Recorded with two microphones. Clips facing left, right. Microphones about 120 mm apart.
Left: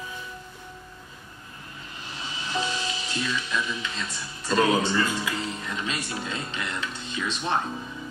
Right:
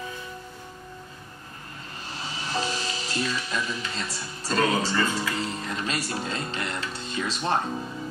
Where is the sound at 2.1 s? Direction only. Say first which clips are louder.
Even; 40° right (ahead or behind).